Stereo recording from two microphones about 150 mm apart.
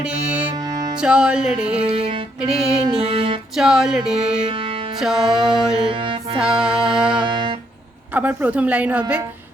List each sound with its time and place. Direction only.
1.0 s music: 5° right (ahead or behind)
1.9 s music: 40° right (ahead or behind)
3.6 s music: 5° right (ahead or behind)
5.8 s music: 35° right (ahead or behind)
6.4 s music: 5° right (ahead or behind)
7.2 s music: 30° right (ahead or behind)
8.1 s a woman's voice: 10° right (ahead or behind)